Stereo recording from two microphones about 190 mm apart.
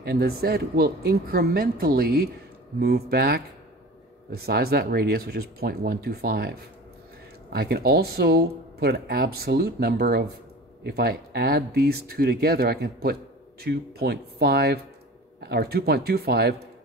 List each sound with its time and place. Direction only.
0.0 s speech: 55° right (ahead or behind)
7.5 s speech: 55° right (ahead or behind)